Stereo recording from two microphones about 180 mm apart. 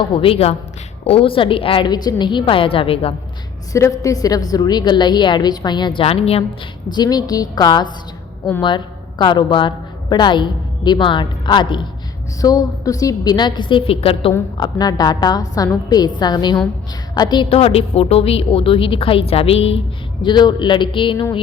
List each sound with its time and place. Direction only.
0.0 s a woman's voice: 30° left (ahead or behind)
3.7 s a woman's voice: 15° left (ahead or behind); by 6.4 s 35° left (ahead or behind)
6.9 s a woman's voice: 20° left (ahead or behind)
14.6 s a woman's voice: 20° left (ahead or behind)